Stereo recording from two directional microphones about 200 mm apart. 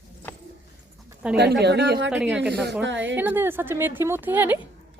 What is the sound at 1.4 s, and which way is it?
Speech, 55° right (ahead or behind).